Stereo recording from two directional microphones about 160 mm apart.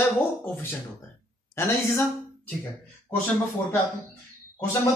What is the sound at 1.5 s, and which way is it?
Speech, 15° left (ahead or behind).